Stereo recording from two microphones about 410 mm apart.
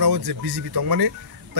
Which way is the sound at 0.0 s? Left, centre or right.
Right.